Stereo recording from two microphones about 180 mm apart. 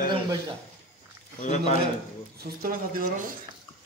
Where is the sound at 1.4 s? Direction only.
40° left (ahead or behind).